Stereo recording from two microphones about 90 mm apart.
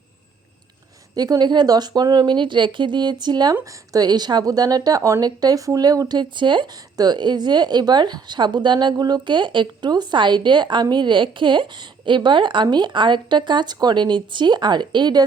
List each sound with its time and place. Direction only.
1.1 s speech: 50° right (ahead or behind)
3.5 s speech: 40° right (ahead or behind); by 6.7 s 65° right (ahead or behind)
6.9 s a woman's voice: 50° right (ahead or behind)